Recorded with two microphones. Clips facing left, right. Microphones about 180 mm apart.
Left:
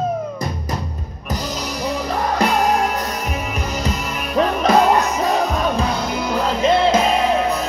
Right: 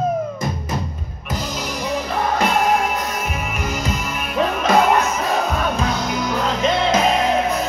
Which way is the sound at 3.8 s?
35° left (ahead or behind).